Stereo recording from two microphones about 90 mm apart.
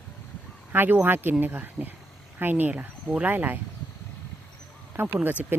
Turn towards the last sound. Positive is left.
turn(degrees=-25)  # may be behind; listen again after turning